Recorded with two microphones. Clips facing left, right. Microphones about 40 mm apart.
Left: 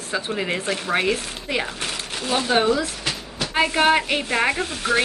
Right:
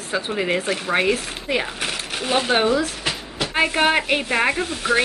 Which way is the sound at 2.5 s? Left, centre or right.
Centre.